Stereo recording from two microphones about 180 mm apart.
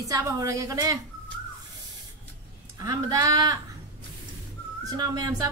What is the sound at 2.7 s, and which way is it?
Speech, 20° right (ahead or behind).